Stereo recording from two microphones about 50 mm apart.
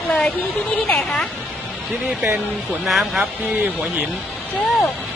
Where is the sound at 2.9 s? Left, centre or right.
Centre.